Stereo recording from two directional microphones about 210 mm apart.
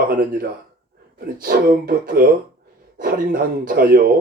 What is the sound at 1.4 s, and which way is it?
Speech, 45° right (ahead or behind).